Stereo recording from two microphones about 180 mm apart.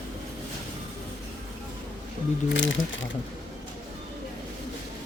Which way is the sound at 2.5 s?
90° left.